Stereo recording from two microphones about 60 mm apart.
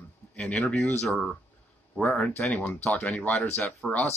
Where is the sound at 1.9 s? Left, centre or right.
Centre.